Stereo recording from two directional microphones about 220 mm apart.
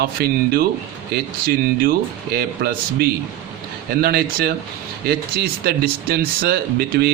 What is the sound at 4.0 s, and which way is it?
A man's voice, 45° right (ahead or behind).